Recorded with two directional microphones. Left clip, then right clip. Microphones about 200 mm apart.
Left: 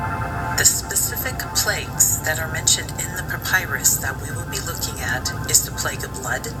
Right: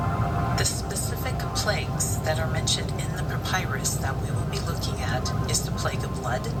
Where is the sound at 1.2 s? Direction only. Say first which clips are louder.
Left 3 dB; 15° left (ahead or behind).